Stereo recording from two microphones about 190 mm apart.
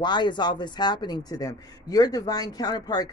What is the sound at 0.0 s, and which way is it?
A man's voice, 25° left (ahead or behind).